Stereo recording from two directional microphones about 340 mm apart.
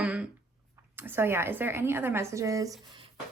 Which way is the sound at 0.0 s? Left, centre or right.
Centre.